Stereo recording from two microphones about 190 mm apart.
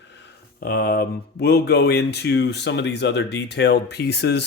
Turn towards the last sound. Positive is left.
turn(degrees=60)  # may be behind; listen again after turning